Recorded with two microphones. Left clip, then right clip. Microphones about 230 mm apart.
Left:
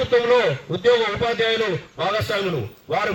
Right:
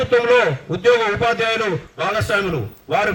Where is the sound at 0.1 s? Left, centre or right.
Right.